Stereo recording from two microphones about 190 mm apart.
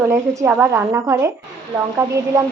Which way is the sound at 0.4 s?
10° right (ahead or behind).